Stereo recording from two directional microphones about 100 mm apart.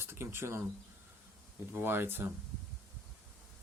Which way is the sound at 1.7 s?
20° right (ahead or behind).